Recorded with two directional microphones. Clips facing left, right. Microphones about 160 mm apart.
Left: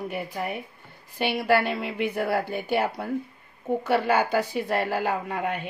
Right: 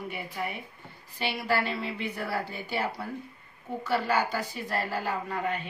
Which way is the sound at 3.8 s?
60° left (ahead or behind).